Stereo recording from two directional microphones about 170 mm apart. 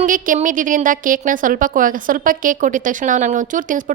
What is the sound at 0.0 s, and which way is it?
A woman's voice, 50° right (ahead or behind).